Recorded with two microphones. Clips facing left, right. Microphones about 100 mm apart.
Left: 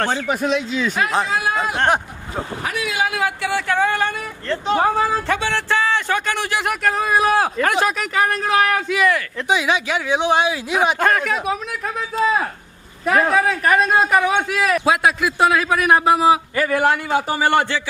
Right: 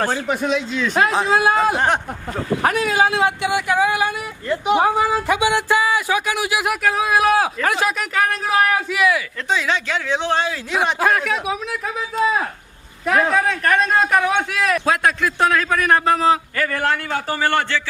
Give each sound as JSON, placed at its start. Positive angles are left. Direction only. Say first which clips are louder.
{"t": 0.3, "sound": "speech", "louder": "even", "side_deg": 0}
{"t": 1.3, "sound": "speech", "louder": "right 5 dB", "side_deg": -30}
{"t": 1.7, "sound": "speech", "louder": "left 1 dB", "side_deg": 0}
{"t": 2.5, "sound": "speech", "louder": "right 13 dB", "side_deg": -65}
{"t": 2.7, "sound": "speech", "louder": "even", "side_deg": -40}
{"t": 9.5, "sound": "a man's voice", "louder": "left 2 dB", "side_deg": 15}